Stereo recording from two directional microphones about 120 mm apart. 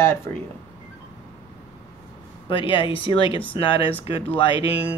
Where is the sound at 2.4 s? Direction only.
45° left (ahead or behind).